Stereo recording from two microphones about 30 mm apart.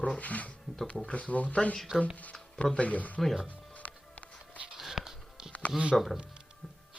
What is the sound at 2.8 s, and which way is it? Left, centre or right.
Speech, left.